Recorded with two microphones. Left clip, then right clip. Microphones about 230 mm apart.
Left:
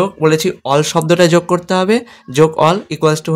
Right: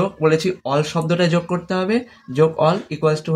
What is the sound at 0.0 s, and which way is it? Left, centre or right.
Speech, left.